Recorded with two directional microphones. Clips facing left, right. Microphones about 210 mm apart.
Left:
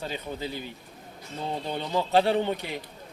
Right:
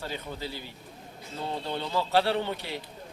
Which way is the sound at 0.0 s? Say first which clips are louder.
Left 3 dB; 15° left (ahead or behind).